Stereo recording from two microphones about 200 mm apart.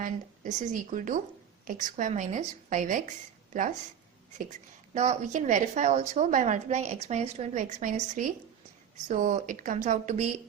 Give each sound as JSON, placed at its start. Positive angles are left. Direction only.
{"t": 0.0, "sound": "a woman's voice", "side_deg": -40}
{"t": 4.9, "sound": "a woman's voice", "side_deg": -35}